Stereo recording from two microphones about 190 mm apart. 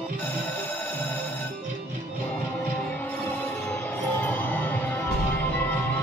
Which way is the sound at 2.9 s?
10° left (ahead or behind).